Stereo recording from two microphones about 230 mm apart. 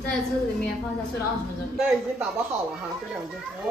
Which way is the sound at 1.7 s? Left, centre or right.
Centre.